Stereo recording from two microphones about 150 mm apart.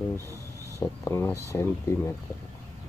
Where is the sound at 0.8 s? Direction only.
15° left (ahead or behind).